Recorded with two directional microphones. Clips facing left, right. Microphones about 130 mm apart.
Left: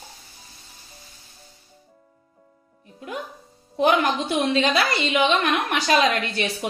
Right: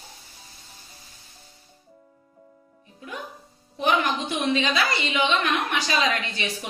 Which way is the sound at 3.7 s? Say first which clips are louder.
Left 4 dB; 50° left (ahead or behind).